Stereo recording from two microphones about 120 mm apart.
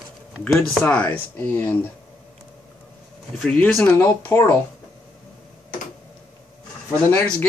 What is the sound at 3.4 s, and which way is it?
Speech, 5° left (ahead or behind).